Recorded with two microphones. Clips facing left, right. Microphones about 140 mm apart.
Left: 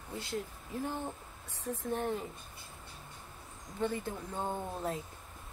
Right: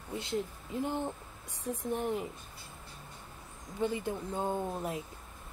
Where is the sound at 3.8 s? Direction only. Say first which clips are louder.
Right 2 dB; 15° right (ahead or behind).